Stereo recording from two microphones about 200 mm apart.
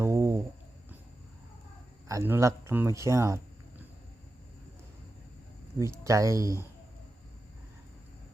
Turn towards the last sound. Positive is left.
turn(degrees=-15)  # may be behind; listen again after turning